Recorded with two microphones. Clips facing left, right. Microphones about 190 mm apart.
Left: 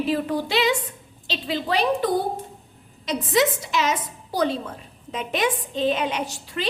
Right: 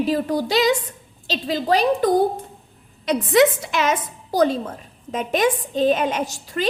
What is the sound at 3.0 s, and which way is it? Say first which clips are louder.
A woman's voice: right 5 dB; 60° right (ahead or behind).